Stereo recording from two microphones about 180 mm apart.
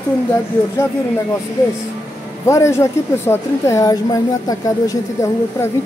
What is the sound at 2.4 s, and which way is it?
A woman's voice, 15° left (ahead or behind).